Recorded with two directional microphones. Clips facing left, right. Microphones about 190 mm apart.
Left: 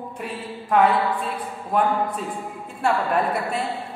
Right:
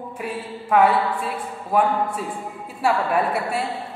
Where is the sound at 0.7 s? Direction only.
10° right (ahead or behind).